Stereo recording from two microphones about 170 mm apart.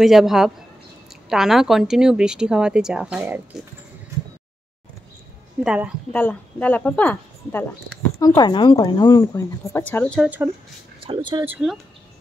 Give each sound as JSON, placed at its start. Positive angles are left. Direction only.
{"t": 0.0, "sound": "a woman's voice", "side_deg": 0}
{"t": 5.6, "sound": "a woman's voice", "side_deg": -5}
{"t": 6.1, "sound": "speech", "side_deg": 10}
{"t": 8.4, "sound": "a woman's voice", "side_deg": 25}
{"t": 10.2, "sound": "speech", "side_deg": -10}
{"t": 11.0, "sound": "speech", "side_deg": -30}
{"t": 11.4, "sound": "speech", "side_deg": -10}